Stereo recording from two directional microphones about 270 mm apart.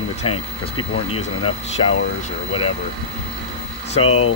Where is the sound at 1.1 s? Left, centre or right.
Left.